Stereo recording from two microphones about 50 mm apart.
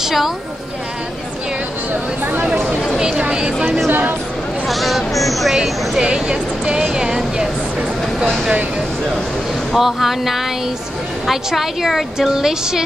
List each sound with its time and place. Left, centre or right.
0.0 s a sound: centre
3.0 s a woman's voice: centre
4.6 s speech: centre
6.0 s a woman's voice: centre
9.8 s a woman's voice: centre